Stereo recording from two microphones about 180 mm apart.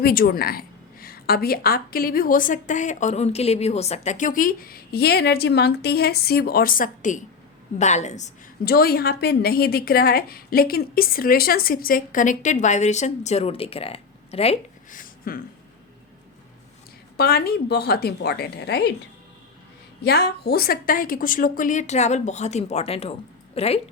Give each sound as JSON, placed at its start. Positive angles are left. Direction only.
{"t": 0.0, "sound": "a woman's voice", "side_deg": 55}
{"t": 8.6, "sound": "a woman's voice", "side_deg": 60}
{"t": 14.8, "sound": "a sound", "side_deg": 50}
{"t": 17.2, "sound": "a woman's voice", "side_deg": 60}
{"t": 20.1, "sound": "a woman's voice", "side_deg": 60}